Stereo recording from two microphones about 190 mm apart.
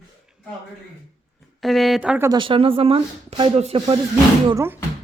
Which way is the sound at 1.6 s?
Centre (ahead or behind).